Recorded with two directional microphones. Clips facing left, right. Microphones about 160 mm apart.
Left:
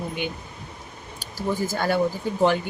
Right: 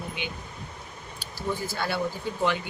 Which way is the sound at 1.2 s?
45° left (ahead or behind).